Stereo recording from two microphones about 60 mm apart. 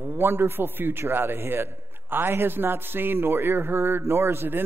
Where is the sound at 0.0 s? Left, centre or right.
Right.